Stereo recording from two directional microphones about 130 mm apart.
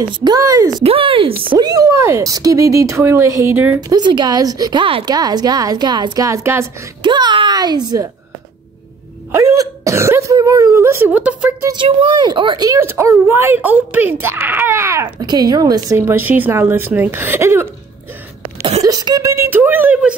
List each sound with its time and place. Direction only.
0.1 s a woman's voice: 35° right (ahead or behind)
0.8 s speech: 45° right (ahead or behind)
1.7 s speech: 25° right (ahead or behind)
3.9 s a woman's voice: 35° right (ahead or behind); by 6.7 s 20° right (ahead or behind)
7.0 s a child's voice: 35° right (ahead or behind)
9.3 s speech: 20° right (ahead or behind)
11.7 s speech: 40° right (ahead or behind); by 15.0 s 20° right (ahead or behind)
15.0 s speech: 35° right (ahead or behind)
18.8 s speech: 30° right (ahead or behind); by 20.2 s 10° right (ahead or behind)